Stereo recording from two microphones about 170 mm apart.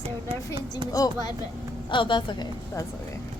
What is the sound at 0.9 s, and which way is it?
A child's voice, 20° left (ahead or behind).